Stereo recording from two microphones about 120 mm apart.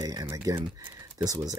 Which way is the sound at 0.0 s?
30° right (ahead or behind).